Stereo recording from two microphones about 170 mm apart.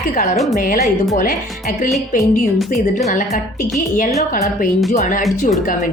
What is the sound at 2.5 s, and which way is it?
Speech, centre (ahead or behind).